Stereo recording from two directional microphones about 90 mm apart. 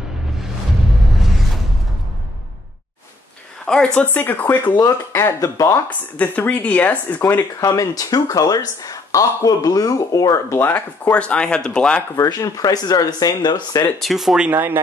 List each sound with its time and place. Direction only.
1.2 s a sound: 5° right (ahead or behind)
3.6 s speech: 10° left (ahead or behind)
5.4 s speech: 35° left (ahead or behind)
5.9 s speech: 15° left (ahead or behind)
7.6 s speech: 40° left (ahead or behind)
10.6 s speech: 15° left (ahead or behind)
12.2 s speech: 40° left (ahead or behind)
13.9 s speech: centre (ahead or behind)
14.5 s speech: 20° right (ahead or behind)